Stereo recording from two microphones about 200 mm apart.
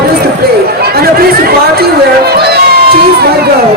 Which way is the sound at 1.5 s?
50° right (ahead or behind).